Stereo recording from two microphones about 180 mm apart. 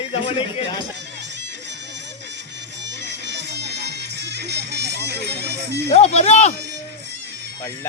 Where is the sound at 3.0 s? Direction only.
75° right (ahead or behind).